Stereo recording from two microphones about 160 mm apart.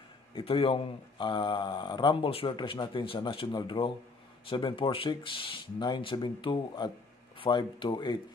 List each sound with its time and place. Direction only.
0.3 s speech: 35° left (ahead or behind)